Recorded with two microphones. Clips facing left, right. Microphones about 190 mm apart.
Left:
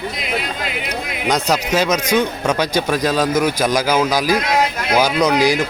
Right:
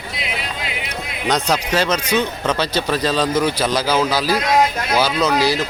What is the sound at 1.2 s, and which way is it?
Speech, 10° left (ahead or behind).